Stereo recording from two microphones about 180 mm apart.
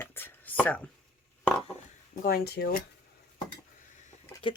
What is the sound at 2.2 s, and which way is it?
Speech, 60° left (ahead or behind).